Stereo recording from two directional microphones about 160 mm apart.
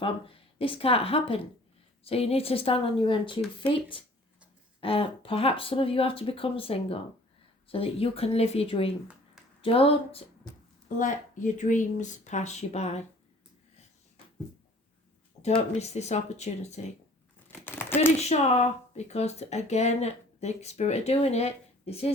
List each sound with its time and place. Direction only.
0.0 s speech: 35° left (ahead or behind)
10.8 s speech: 50° left (ahead or behind)
15.7 s speech: 45° left (ahead or behind)
17.5 s a sound: 10° left (ahead or behind)
18.2 s speech: 45° left (ahead or behind)